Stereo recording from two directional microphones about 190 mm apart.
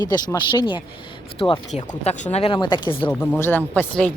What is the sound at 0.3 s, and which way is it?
Speech, 25° left (ahead or behind).